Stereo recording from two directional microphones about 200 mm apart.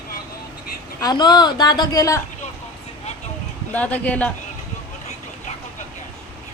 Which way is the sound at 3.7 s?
10° left (ahead or behind).